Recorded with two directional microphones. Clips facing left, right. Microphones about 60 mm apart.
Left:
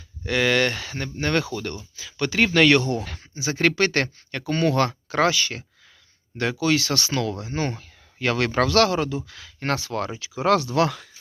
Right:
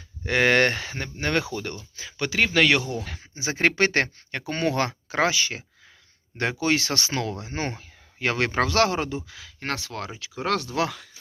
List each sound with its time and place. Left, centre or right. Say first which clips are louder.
0.3 s speech: right 1 dB; right
1.2 s speech: left 2 dB; centre
2.3 s speech: left 3 dB; centre
3.3 s speech: left 1 dB; right
6.3 s speech: left 2 dB; right
9.3 s speech: left 5 dB; centre